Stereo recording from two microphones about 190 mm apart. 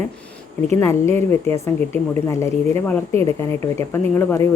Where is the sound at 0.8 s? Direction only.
15° left (ahead or behind).